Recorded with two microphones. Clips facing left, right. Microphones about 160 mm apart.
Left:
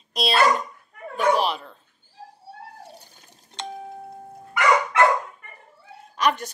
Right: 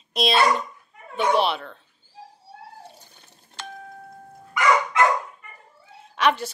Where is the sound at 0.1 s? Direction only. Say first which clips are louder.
Even; 35° left (ahead or behind).